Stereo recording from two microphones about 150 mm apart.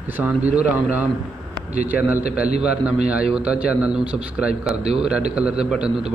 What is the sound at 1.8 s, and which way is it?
A man's voice, 10° right (ahead or behind).